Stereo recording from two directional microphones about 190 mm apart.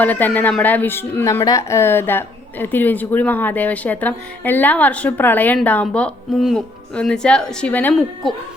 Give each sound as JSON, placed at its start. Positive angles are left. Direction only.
{"t": 0.0, "sound": "a woman's voice", "side_deg": 10}